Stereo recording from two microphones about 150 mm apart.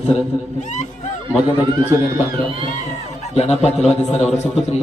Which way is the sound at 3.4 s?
45° left (ahead or behind).